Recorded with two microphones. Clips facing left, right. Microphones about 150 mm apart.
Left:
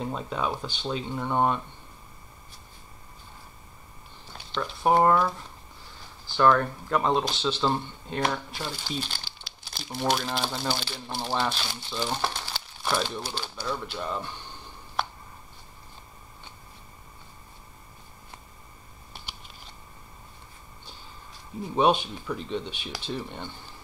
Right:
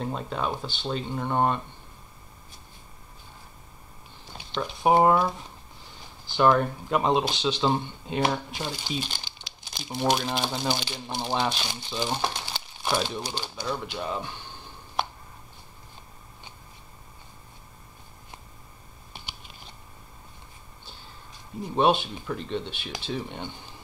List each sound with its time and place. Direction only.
0.0 s speech: centre (ahead or behind)
4.3 s speech: 15° right (ahead or behind)
21.7 s speech: centre (ahead or behind)